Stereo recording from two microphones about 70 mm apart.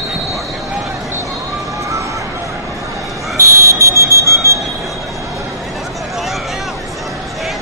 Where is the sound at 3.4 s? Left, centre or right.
Right.